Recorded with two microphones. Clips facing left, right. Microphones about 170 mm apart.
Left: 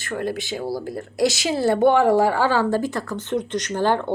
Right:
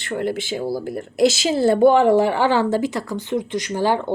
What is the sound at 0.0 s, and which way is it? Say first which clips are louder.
A woman's voice: right 3 dB; 25° right (ahead or behind).